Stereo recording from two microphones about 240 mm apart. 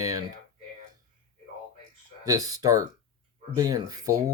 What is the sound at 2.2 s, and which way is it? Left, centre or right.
Speech, centre.